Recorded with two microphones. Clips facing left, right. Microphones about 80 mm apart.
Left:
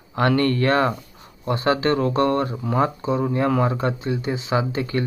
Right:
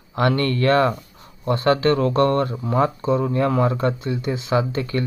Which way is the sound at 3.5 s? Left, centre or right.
Left.